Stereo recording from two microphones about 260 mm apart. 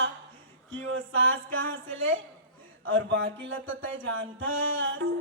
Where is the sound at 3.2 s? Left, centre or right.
Right.